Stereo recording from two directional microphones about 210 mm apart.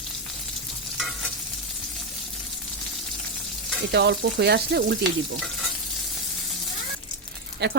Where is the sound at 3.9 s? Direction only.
55° right (ahead or behind).